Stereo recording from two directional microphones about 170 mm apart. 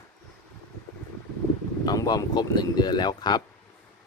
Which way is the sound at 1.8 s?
20° left (ahead or behind).